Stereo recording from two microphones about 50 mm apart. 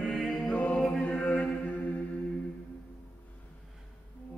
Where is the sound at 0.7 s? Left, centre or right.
Centre.